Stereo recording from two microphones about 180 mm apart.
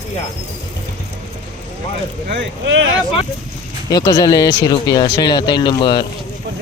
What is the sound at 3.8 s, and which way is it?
Speech, 20° left (ahead or behind).